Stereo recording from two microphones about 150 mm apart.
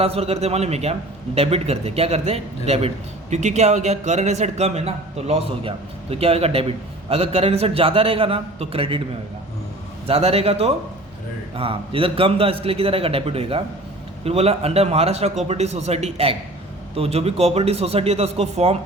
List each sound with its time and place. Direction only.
0.0 s a man's voice: 40° right (ahead or behind)
10.1 s a man's voice: 40° right (ahead or behind)